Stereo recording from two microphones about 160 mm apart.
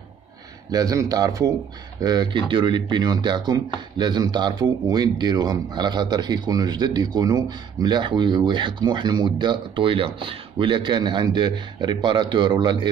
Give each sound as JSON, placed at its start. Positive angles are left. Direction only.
{"t": 0.7, "sound": "speech", "side_deg": -25}